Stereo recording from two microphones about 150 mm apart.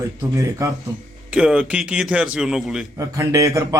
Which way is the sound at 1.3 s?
5° right (ahead or behind).